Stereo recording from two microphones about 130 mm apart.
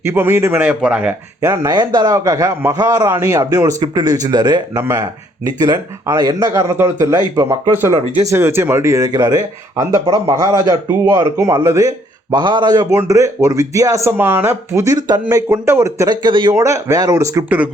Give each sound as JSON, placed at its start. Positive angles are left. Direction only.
{"t": 0.0, "sound": "a man's voice", "side_deg": -15}
{"t": 1.4, "sound": "speech", "side_deg": -25}
{"t": 4.8, "sound": "a man's voice", "side_deg": -20}
{"t": 16.2, "sound": "a man's voice", "side_deg": -35}
{"t": 16.6, "sound": "speech", "side_deg": -25}